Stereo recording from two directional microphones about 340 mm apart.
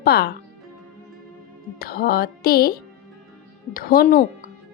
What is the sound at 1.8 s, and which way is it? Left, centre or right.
Speech, left.